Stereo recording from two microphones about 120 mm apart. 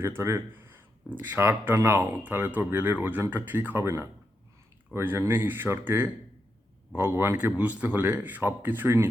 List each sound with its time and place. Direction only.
0.0 s speech: 20° right (ahead or behind)